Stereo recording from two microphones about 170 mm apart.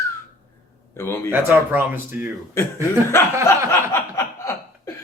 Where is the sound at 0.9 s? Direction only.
15° left (ahead or behind).